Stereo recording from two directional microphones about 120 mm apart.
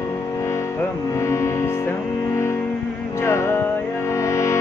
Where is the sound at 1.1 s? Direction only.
25° left (ahead or behind).